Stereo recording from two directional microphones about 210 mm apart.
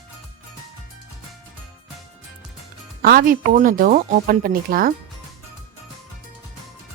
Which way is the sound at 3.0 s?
45° right (ahead or behind).